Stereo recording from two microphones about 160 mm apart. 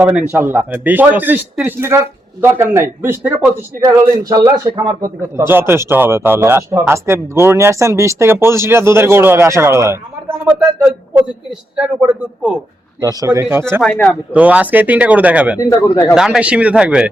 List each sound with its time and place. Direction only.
0.0 s a man's voice: 10° right (ahead or behind)
13.0 s a man's voice: 20° right (ahead or behind)
13.8 s speech: 5° left (ahead or behind)
14.3 s a man's voice: 10° right (ahead or behind)
15.7 s speech: 10° left (ahead or behind)
16.1 s speech: 5° right (ahead or behind)